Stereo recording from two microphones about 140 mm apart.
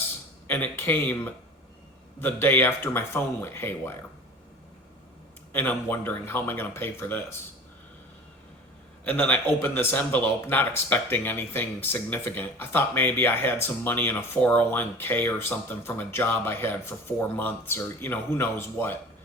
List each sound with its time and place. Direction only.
0.4 s speech: 15° left (ahead or behind)
5.5 s speech: 15° left (ahead or behind)
9.0 s speech: 15° left (ahead or behind)